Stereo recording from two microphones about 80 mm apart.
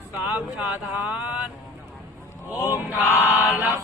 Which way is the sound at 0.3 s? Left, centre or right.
Centre.